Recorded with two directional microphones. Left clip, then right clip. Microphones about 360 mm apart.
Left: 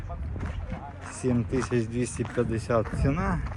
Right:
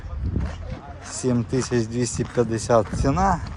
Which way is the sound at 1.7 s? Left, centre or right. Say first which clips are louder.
Right 5 dB; centre.